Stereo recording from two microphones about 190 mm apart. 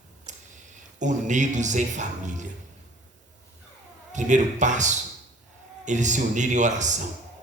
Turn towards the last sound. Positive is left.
turn(degrees=-40)  # may be behind; listen again after turning